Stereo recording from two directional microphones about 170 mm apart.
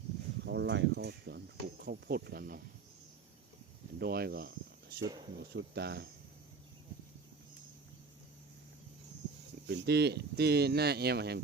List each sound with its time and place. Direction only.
0.4 s speech: 90° right; by 2.6 s 65° right (ahead or behind)
4.0 s speech: 65° right (ahead or behind)
4.9 s speech: 20° right (ahead or behind)
5.4 s speech: 75° right (ahead or behind)
9.6 s speech: 75° right (ahead or behind)